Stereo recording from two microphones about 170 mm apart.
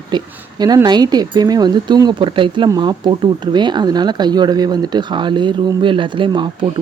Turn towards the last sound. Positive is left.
turn(degrees=-30)  # may be behind; listen again after turning